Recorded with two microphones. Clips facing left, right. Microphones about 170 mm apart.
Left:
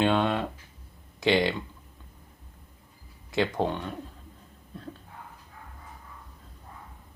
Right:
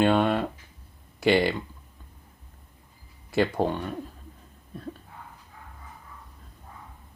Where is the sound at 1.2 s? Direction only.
10° right (ahead or behind).